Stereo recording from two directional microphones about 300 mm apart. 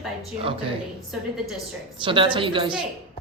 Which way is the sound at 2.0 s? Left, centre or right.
Centre.